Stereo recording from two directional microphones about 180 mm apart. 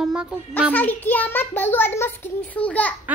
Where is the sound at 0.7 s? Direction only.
10° left (ahead or behind).